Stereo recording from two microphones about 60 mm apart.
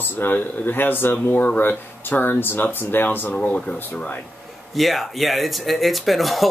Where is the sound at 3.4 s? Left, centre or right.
Left.